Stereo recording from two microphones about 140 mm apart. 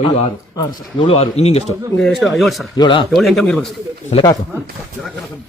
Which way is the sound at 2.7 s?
35° left (ahead or behind).